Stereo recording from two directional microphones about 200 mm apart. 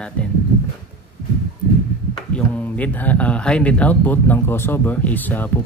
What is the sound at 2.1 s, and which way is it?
Speech, 5° left (ahead or behind).